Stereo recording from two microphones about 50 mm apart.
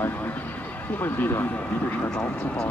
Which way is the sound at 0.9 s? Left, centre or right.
Left.